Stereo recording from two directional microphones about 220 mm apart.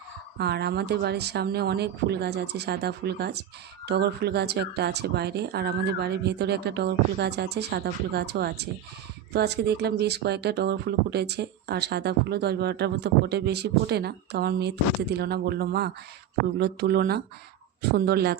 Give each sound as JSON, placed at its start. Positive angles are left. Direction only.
{"t": 0.3, "sound": "speech", "side_deg": -50}